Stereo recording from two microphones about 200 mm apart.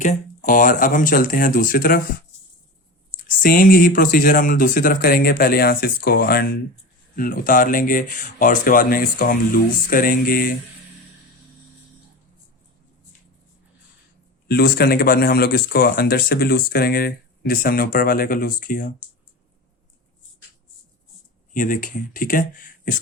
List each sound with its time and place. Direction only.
0.0 s speech: 40° left (ahead or behind)
3.2 s speech: 45° left (ahead or behind)
14.4 s speech: 50° left (ahead or behind)
21.5 s speech: 40° left (ahead or behind)